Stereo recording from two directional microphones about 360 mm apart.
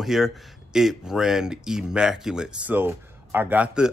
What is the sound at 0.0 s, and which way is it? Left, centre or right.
Speech, centre.